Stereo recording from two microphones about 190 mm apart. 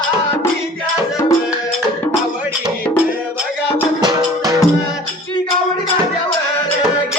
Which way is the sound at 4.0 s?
20° right (ahead or behind).